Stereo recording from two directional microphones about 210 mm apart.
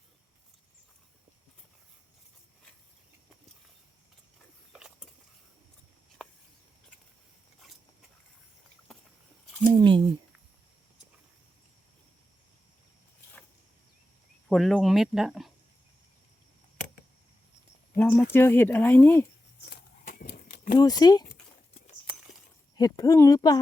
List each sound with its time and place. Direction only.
4.7 s mechanisms: centre (ahead or behind)
6.2 s a sound: 5° left (ahead or behind)
9.6 s speech: 25° right (ahead or behind)
14.5 s speech: centre (ahead or behind)
17.9 s speech: 10° left (ahead or behind)
19.6 s a sound: 50° left (ahead or behind)
20.7 s speech: 20° left (ahead or behind)
22.8 s speech: 15° left (ahead or behind)